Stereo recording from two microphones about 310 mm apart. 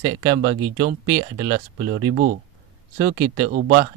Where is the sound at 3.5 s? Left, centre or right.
Right.